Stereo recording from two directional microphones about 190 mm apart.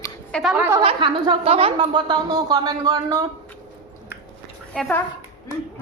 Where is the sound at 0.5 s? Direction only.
10° right (ahead or behind).